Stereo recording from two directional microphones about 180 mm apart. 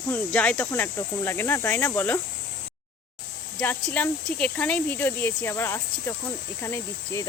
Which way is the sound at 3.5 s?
10° left (ahead or behind).